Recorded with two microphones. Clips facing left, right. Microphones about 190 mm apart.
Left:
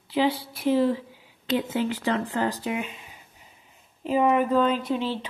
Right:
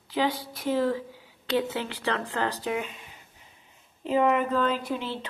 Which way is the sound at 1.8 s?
15° left (ahead or behind).